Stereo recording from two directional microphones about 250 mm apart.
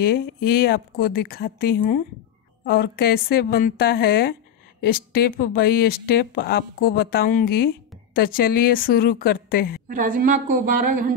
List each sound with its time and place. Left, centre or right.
0.0 s speech: left
9.8 s a woman's voice: right